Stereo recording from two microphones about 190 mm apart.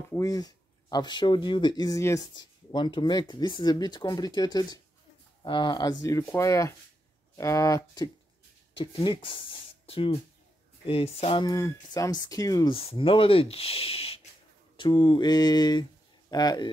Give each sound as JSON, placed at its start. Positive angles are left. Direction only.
{"t": 0.1, "sound": "speech", "side_deg": 15}